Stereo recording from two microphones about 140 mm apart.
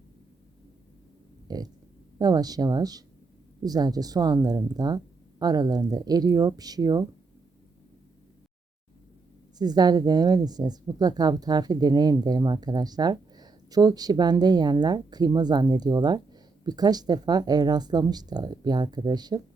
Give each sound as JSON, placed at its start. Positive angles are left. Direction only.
{"t": 1.5, "sound": "pig", "side_deg": -30}
{"t": 2.1, "sound": "speech", "side_deg": -30}
{"t": 9.6, "sound": "speech", "side_deg": -30}